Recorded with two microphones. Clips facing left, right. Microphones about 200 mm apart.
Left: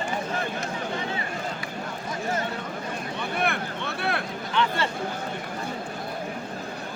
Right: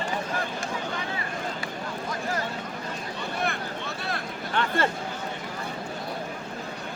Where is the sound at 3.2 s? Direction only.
60° left (ahead or behind).